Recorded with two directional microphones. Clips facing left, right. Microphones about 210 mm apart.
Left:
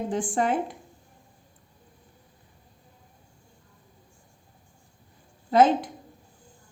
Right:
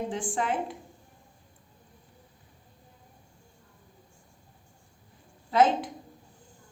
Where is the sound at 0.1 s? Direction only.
45° left (ahead or behind).